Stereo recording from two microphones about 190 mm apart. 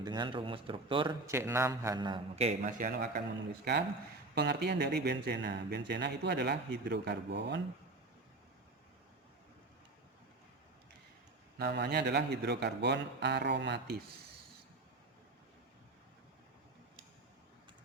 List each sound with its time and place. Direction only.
0.0 s speech: 25° right (ahead or behind)
1.3 s a man's voice: 15° right (ahead or behind); by 7.6 s 65° right (ahead or behind)
11.5 s a man's voice: 60° right (ahead or behind)